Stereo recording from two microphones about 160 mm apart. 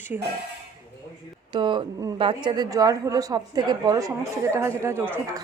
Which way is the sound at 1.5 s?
30° right (ahead or behind).